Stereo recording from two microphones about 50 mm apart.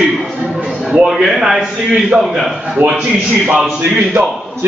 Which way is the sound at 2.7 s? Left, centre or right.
Right.